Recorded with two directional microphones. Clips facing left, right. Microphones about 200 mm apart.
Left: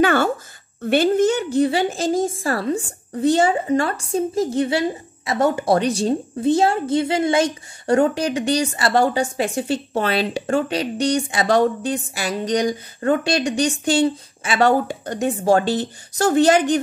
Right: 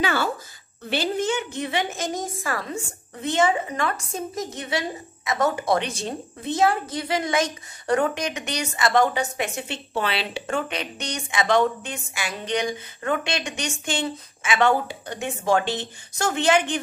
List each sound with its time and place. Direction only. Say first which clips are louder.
0.0 s a woman's voice: left 7 dB; 50° left (ahead or behind)